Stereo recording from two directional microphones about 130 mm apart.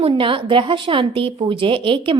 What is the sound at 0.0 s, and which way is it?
A woman's voice, 40° right (ahead or behind).